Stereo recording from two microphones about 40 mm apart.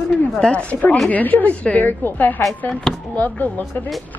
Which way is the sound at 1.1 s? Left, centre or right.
Left.